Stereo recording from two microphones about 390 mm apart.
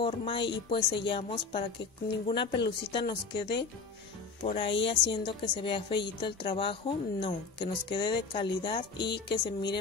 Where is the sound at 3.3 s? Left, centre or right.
Left.